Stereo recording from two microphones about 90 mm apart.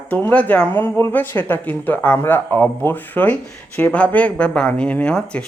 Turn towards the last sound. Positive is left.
turn(degrees=10)  # may be behind; listen again after turning